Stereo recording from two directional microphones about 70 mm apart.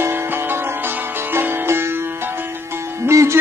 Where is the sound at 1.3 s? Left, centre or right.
Right.